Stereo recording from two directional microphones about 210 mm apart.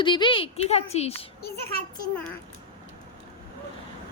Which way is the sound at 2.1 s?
5° left (ahead or behind).